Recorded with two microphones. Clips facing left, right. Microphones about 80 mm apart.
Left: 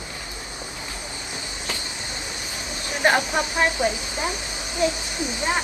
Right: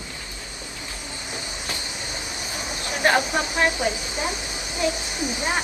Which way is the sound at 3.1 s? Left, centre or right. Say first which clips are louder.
Even; left.